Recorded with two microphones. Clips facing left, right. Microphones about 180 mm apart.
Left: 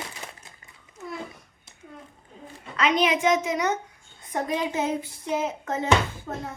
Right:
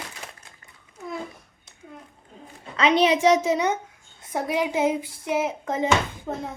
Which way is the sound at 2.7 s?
30° right (ahead or behind).